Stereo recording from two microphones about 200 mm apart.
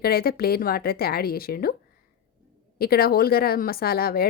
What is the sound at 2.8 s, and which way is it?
Speech, 50° left (ahead or behind).